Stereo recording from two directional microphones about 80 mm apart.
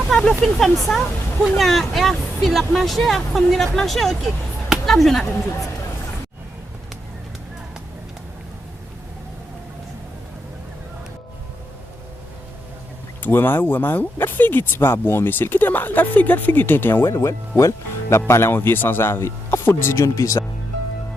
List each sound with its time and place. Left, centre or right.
0.1 s a sound: centre
0.4 s speech: centre
13.2 s speech: left